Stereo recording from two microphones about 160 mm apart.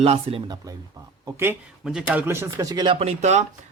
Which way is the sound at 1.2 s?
15° right (ahead or behind).